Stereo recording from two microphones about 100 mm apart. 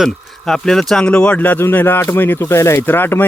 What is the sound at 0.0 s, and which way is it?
Speech, 5° left (ahead or behind).